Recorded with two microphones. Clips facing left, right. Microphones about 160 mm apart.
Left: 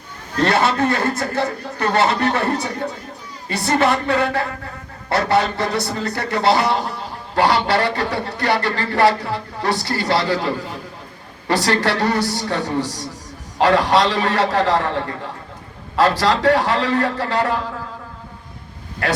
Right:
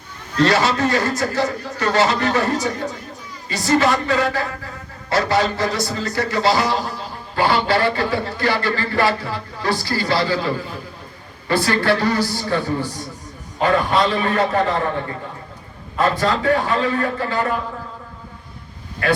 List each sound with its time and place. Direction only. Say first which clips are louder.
0.4 s a man's voice: even; 55° left (ahead or behind); by 14.8 s 90° left
16.0 s a man's voice: left 2 dB; 85° left